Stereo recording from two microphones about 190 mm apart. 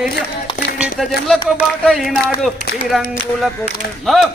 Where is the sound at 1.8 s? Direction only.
Centre (ahead or behind).